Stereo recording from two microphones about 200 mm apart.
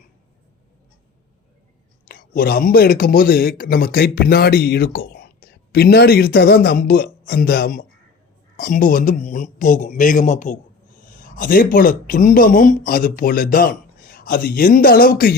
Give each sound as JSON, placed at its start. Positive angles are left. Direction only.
{"t": 2.0, "sound": "speech", "side_deg": 50}